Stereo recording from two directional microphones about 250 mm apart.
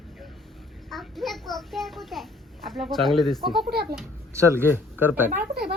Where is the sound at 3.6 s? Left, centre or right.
Right.